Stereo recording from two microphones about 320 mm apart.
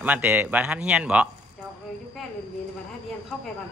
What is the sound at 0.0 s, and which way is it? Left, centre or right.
Speech, centre.